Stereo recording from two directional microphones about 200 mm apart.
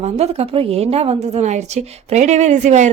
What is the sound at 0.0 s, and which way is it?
A woman's voice, 30° right (ahead or behind).